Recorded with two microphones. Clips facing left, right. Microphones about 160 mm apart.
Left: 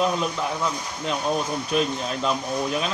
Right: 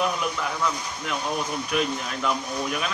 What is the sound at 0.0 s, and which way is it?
Speech, 25° left (ahead or behind).